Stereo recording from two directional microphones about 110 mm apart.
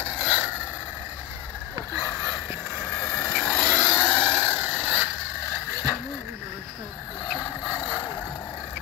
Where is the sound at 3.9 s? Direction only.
10° left (ahead or behind).